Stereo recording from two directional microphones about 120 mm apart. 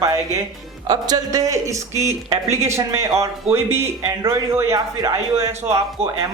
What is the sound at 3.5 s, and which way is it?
Speech, 60° right (ahead or behind).